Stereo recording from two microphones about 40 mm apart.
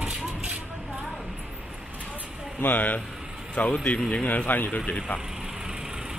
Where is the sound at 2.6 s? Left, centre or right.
Left.